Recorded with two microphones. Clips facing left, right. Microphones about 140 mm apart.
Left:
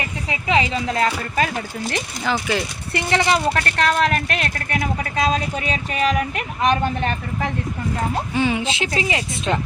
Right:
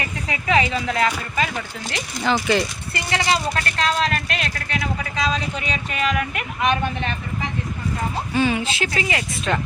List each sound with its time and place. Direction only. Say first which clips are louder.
0.3 s speech: even; 25° left (ahead or behind)
2.2 s speech: right 3 dB; 5° left (ahead or behind)
2.9 s speech: left 4 dB; 60° left (ahead or behind); by 7.5 s 45° left (ahead or behind)
8.4 s speech: right 1 dB; 20° left (ahead or behind)